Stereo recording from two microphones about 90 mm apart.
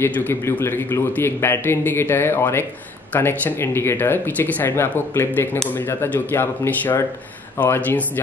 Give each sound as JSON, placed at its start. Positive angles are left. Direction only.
{"t": 0.0, "sound": "speech", "side_deg": 20}